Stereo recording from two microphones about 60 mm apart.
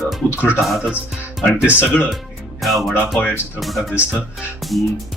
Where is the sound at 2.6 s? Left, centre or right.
Centre.